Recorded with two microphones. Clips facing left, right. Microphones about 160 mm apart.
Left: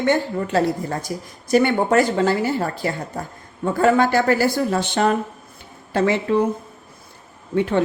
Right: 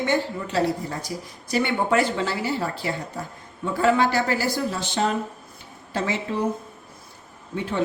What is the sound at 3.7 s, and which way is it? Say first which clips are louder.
A woman's voice: left 4 dB; 50° left (ahead or behind).